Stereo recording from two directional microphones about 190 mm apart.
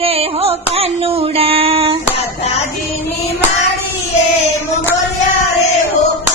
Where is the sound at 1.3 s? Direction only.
30° right (ahead or behind).